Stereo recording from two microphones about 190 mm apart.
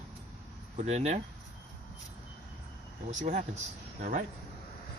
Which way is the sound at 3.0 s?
40° right (ahead or behind).